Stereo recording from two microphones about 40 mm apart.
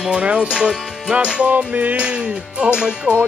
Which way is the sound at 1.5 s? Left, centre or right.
Right.